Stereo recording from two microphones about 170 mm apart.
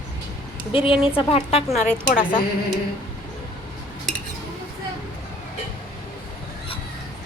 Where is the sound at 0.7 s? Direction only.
30° left (ahead or behind).